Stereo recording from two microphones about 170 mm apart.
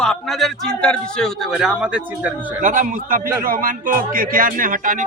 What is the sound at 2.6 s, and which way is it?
Speech, 50° right (ahead or behind).